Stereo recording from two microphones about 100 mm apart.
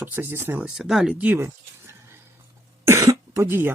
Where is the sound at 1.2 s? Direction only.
20° right (ahead or behind).